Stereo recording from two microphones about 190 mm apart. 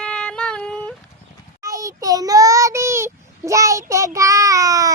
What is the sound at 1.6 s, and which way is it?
Child singing, 20° right (ahead or behind).